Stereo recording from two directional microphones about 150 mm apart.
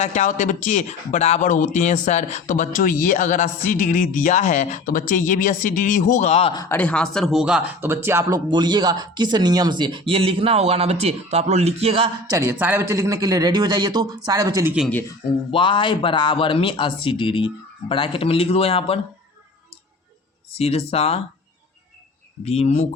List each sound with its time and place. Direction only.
0.0 s speech: 50° left (ahead or behind)
6.5 s speech: 25° left (ahead or behind)
6.7 s speech: 10° left (ahead or behind); by 8.4 s 15° right (ahead or behind)
8.4 s speech: 30° right (ahead or behind)
12.3 s a man's voice: 20° right (ahead or behind)
15.5 s speech: 35° left (ahead or behind)
20.6 s speech: 45° left (ahead or behind)
22.4 s speech: 45° left (ahead or behind)